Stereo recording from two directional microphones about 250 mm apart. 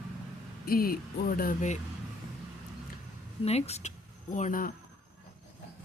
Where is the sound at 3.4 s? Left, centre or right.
Left.